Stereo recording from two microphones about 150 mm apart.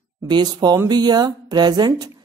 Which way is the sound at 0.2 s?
30° right (ahead or behind).